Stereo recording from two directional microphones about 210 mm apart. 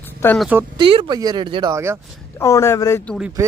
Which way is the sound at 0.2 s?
10° left (ahead or behind).